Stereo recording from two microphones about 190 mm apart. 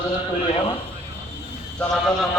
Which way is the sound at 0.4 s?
30° left (ahead or behind).